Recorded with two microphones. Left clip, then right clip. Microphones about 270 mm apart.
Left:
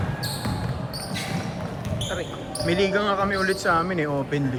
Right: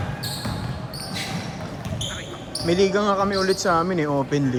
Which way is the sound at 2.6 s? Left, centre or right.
Centre.